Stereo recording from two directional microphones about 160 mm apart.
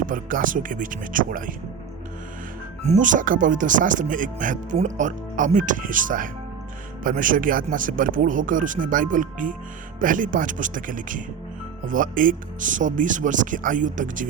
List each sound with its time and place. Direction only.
0.0 s speech: 55° right (ahead or behind)
2.8 s speech: 50° right (ahead or behind)